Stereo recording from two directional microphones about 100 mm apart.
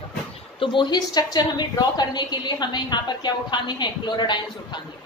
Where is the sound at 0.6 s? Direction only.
50° left (ahead or behind).